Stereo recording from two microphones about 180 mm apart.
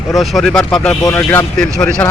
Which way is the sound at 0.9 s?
20° left (ahead or behind).